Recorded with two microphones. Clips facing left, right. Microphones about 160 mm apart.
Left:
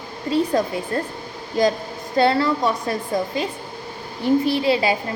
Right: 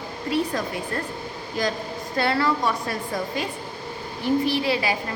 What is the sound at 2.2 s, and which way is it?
Speech, 25° left (ahead or behind).